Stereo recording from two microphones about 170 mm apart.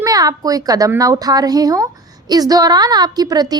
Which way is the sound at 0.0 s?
20° right (ahead or behind).